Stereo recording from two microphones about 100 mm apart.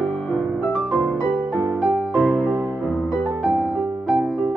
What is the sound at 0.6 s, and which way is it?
Music, centre (ahead or behind).